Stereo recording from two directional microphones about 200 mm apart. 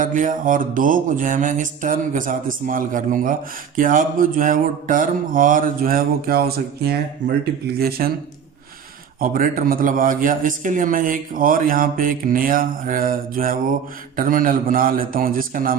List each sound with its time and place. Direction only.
0.0 s mantra: 40° right (ahead or behind)
9.2 s mantra: 45° right (ahead or behind)